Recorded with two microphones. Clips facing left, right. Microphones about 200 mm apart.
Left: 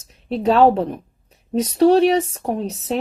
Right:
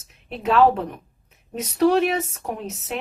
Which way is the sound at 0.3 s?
35° left (ahead or behind).